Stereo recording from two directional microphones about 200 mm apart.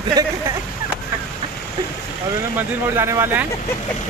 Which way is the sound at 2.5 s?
10° right (ahead or behind).